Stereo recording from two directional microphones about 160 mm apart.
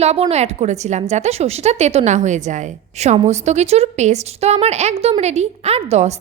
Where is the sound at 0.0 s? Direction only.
40° right (ahead or behind).